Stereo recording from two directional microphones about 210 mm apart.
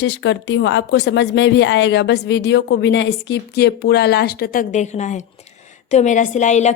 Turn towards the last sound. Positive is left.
turn(degrees=35)  # may be behind; listen again after turning